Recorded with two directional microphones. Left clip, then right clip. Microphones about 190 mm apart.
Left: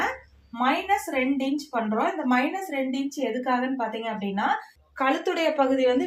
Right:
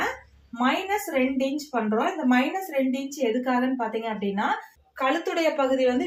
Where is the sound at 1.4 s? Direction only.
35° left (ahead or behind).